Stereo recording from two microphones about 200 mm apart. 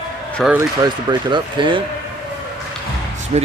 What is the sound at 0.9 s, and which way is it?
Speech, 25° right (ahead or behind).